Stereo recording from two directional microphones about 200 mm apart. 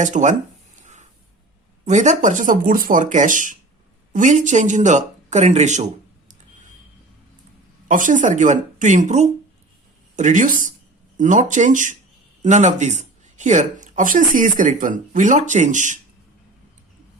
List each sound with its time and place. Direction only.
0.0 s speech: 35° right (ahead or behind)
1.8 s speech: 35° right (ahead or behind)
7.9 s speech: 40° right (ahead or behind)